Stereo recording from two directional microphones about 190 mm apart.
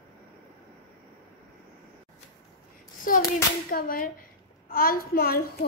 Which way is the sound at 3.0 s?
45° left (ahead or behind).